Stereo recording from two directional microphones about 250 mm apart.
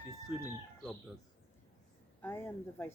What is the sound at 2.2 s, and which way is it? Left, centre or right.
Speech, centre.